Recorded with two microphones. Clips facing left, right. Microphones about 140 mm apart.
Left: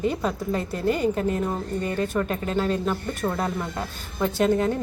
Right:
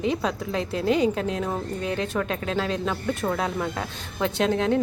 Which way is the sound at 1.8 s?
80° right.